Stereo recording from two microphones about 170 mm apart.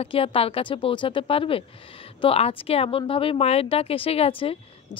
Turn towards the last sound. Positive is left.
turn(degrees=35)  # may be behind; listen again after turning